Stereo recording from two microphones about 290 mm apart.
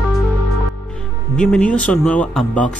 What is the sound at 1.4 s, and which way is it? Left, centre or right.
Speech, centre.